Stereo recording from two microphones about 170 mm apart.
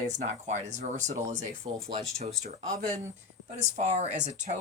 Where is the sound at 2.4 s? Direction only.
50° right (ahead or behind).